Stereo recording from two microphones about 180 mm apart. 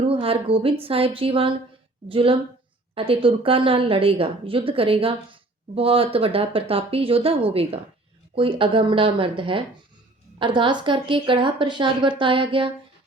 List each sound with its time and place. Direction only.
0.0 s a woman's voice: 30° right (ahead or behind)